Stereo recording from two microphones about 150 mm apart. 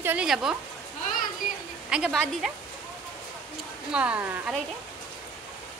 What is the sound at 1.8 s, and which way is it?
Speech, 5° right (ahead or behind).